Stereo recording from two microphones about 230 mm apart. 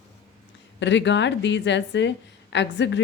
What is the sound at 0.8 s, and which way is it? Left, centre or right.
A woman's voice, left.